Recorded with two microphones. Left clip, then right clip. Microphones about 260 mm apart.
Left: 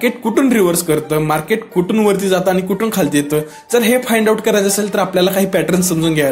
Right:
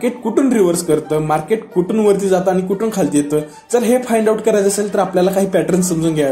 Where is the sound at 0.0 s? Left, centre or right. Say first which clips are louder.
Left 1 dB; left.